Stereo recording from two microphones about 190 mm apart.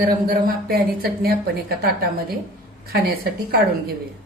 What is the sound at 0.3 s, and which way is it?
A woman's voice, 55° right (ahead or behind).